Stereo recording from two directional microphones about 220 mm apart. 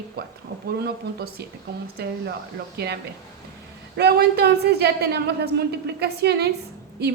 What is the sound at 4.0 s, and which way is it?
A woman's voice, 45° right (ahead or behind).